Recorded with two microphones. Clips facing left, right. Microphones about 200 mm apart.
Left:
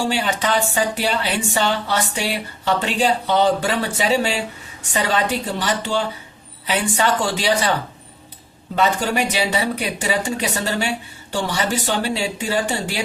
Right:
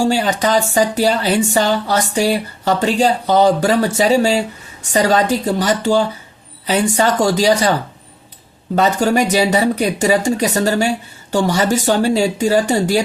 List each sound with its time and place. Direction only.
0.0 s speech: 40° right (ahead or behind)